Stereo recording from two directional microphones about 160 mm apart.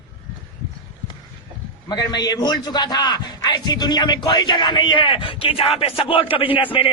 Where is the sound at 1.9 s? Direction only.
25° left (ahead or behind).